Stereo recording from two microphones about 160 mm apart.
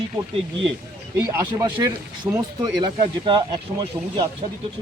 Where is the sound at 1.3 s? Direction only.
20° right (ahead or behind).